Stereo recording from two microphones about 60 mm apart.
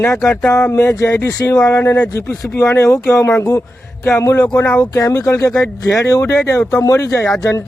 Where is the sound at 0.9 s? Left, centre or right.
Left.